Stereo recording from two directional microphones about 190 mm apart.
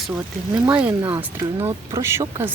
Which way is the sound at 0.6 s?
10° right (ahead or behind).